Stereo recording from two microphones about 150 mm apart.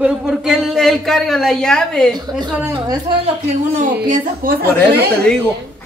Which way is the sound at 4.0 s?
75° right (ahead or behind).